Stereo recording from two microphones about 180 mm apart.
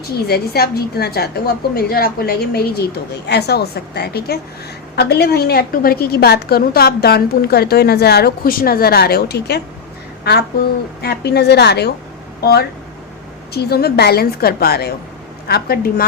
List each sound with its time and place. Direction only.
0.3 s a woman's voice: 60° left (ahead or behind)
11.0 s a woman's voice: 65° left (ahead or behind)